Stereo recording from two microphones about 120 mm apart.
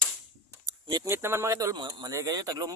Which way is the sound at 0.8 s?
35° right (ahead or behind).